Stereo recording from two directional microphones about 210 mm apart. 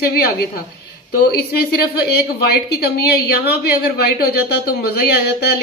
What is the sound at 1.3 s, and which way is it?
A woman's voice, 50° left (ahead or behind).